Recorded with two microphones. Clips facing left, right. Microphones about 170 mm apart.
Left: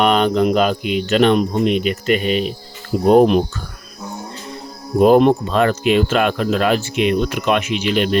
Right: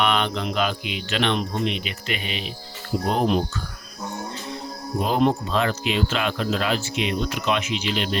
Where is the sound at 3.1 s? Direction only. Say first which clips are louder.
Left 11 dB; 55° left (ahead or behind).